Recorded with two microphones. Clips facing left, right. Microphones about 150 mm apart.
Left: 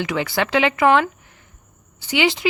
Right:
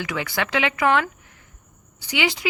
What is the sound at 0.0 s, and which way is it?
Speech, 30° left (ahead or behind).